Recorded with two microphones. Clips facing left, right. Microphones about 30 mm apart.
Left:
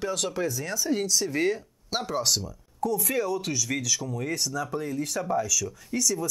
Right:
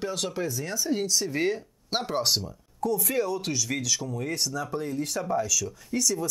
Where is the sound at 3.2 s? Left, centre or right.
Right.